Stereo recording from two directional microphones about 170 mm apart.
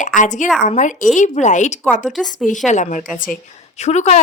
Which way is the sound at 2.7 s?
45° left (ahead or behind).